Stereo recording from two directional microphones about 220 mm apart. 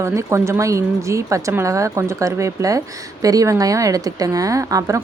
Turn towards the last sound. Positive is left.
turn(degrees=-15)  # may be behind; listen again after turning